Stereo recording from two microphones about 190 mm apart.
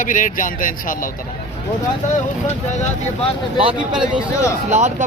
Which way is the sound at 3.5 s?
30° right (ahead or behind).